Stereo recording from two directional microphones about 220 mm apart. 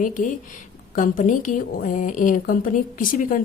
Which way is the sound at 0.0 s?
35° left (ahead or behind).